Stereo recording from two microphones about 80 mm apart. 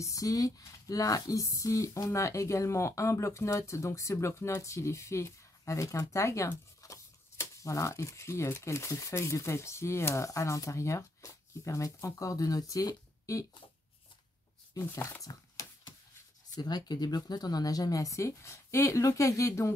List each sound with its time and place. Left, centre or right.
0.0 s speech: left
14.8 s speech: left
15.2 s a sound: left
16.5 s speech: left